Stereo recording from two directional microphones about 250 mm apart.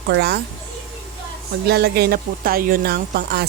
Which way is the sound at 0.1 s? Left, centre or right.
Right.